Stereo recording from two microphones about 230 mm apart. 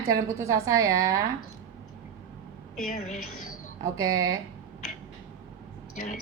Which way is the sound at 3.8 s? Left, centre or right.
Centre.